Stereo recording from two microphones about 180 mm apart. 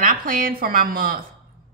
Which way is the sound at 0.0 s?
50° right (ahead or behind).